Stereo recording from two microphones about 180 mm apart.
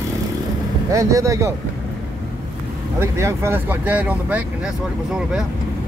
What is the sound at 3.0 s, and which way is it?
Speech, 15° right (ahead or behind).